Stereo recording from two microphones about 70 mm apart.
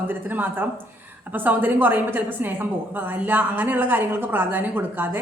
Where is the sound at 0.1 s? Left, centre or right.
Right.